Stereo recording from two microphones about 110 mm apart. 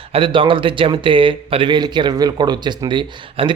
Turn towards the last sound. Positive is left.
turn(degrees=-45)  # may be behind; listen again after turning